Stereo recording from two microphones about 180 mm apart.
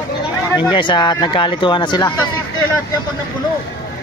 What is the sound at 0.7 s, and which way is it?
Speech, 25° left (ahead or behind).